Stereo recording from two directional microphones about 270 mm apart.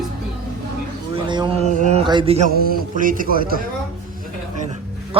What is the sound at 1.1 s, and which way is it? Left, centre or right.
Speech, centre.